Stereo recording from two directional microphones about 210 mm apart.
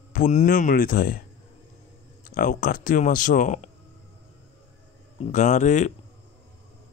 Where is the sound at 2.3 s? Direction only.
40° left (ahead or behind).